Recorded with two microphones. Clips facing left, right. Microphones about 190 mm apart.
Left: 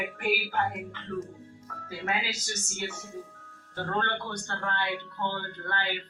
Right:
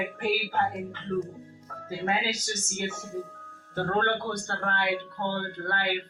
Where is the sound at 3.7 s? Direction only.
50° right (ahead or behind).